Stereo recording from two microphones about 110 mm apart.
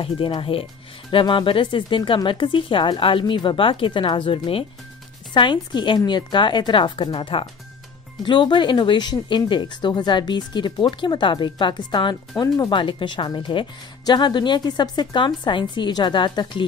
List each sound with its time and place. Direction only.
0.0 s speech: 55° left (ahead or behind)